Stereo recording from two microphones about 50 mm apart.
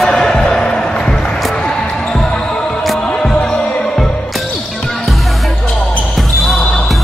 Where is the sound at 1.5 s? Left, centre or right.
Centre.